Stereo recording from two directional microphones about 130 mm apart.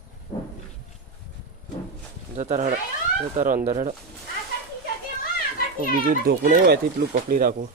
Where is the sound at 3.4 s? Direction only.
80° right.